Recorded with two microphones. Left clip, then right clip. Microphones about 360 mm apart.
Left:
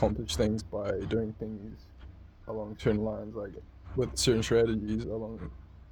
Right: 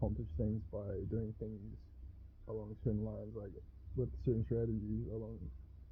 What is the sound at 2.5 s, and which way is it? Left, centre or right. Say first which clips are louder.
Speech: left 12 dB; centre.